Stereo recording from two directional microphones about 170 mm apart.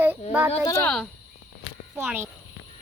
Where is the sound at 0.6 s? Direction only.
20° left (ahead or behind).